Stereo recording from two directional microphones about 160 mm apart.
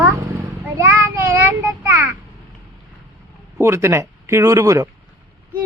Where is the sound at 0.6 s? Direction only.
15° right (ahead or behind).